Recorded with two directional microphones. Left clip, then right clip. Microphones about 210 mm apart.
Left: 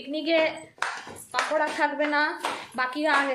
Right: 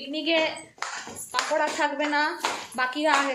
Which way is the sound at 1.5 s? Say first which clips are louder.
Even; 5° left (ahead or behind).